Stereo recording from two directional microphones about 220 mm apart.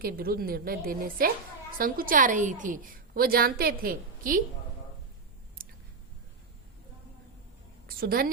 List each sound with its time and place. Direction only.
0.0 s a woman's voice: 40° right (ahead or behind)
5.6 s a sound: 40° right (ahead or behind)
7.9 s a woman's voice: 40° right (ahead or behind)